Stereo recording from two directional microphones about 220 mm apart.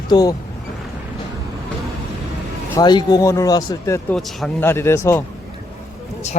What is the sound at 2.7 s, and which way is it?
Speech, 20° left (ahead or behind).